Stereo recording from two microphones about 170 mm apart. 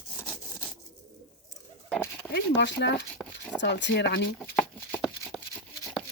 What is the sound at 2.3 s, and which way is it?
Speech, 90° left.